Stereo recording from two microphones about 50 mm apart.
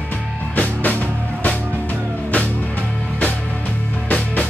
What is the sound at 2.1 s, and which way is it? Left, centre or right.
Music, left.